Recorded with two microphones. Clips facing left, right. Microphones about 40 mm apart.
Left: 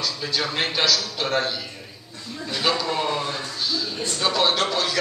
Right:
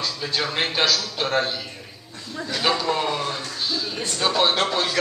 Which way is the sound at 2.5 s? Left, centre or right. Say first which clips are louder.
Right 1 dB; centre.